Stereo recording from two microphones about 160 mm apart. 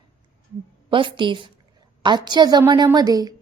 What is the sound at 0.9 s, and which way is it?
A woman's voice, 30° right (ahead or behind).